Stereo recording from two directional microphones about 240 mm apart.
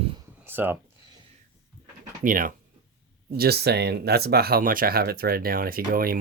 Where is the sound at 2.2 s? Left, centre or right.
Right.